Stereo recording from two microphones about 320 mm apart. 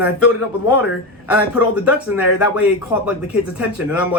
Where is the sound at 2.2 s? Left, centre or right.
Left.